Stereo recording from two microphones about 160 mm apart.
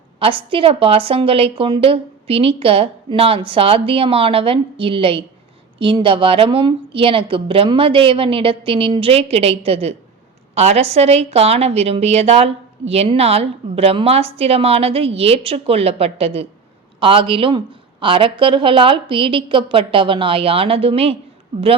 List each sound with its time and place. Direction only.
0.2 s a woman's voice: 35° right (ahead or behind)